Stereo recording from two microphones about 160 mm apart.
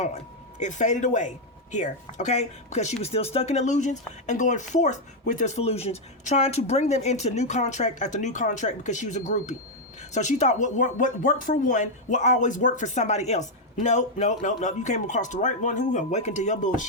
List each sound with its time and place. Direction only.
0.6 s speech: 50° left (ahead or behind)